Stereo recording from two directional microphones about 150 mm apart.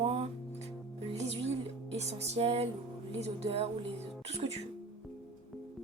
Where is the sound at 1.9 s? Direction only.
45° right (ahead or behind).